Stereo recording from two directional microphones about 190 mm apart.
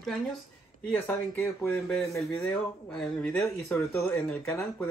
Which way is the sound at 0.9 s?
10° left (ahead or behind).